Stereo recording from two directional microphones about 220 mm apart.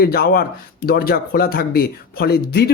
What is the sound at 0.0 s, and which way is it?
Speech, 45° left (ahead or behind).